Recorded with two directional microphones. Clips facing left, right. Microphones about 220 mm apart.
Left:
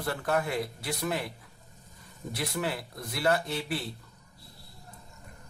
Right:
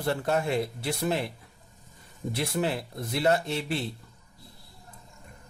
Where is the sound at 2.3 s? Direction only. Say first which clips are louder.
Right 4 dB; 25° right (ahead or behind).